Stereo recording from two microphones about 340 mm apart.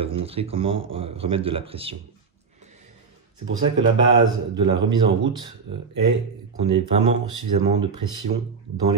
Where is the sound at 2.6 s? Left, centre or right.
Right.